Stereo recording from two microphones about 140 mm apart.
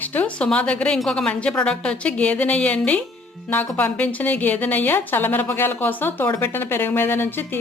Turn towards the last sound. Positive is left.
turn(degrees=15)  # may be behind; listen again after turning